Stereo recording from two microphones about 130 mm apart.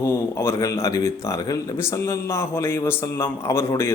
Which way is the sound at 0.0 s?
20° left (ahead or behind).